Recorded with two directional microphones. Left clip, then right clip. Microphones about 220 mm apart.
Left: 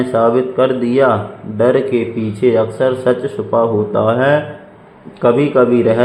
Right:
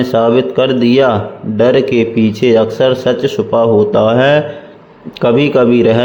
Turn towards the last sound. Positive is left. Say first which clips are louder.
# right 2 dB
turn(degrees=-35)  # may be behind; listen again after turning